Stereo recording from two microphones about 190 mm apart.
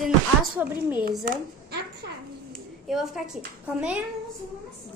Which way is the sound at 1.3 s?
60° right (ahead or behind).